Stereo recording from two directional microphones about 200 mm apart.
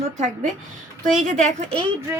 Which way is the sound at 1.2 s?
35° right (ahead or behind).